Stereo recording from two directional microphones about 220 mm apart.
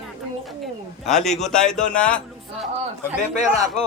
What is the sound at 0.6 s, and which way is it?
A man's voice, centre (ahead or behind).